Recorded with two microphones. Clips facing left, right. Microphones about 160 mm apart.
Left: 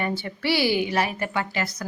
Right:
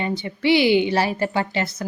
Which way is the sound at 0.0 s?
20° right (ahead or behind).